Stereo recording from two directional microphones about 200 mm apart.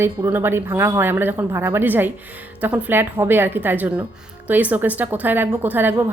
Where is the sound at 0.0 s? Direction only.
10° right (ahead or behind).